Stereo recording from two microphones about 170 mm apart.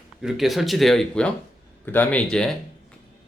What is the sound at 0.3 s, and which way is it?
Speech, centre (ahead or behind).